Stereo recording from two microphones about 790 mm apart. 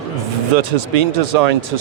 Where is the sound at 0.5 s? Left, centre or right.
Right.